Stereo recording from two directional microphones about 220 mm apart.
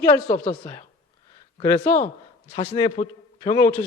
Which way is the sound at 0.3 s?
30° left (ahead or behind).